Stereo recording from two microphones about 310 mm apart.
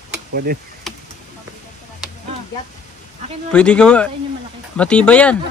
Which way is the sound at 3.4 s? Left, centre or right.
Centre.